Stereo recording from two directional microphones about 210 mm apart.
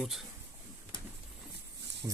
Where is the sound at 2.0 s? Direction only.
10° right (ahead or behind).